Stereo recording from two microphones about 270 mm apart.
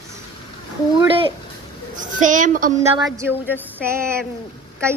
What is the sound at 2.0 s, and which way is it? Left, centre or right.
Speech, right.